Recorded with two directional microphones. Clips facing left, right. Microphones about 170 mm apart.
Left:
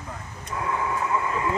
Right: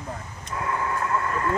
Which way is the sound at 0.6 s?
Centre (ahead or behind).